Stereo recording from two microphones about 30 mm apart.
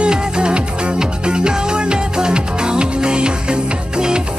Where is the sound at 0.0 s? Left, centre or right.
Right.